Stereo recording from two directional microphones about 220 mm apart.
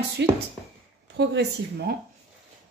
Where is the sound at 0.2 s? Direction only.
50° right (ahead or behind).